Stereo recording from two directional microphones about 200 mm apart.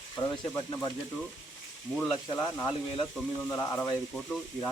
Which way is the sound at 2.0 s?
10° left (ahead or behind).